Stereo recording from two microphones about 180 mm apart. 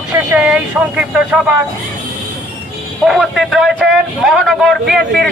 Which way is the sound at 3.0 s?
Centre (ahead or behind).